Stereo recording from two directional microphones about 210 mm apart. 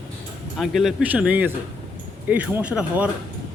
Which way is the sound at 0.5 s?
Centre (ahead or behind).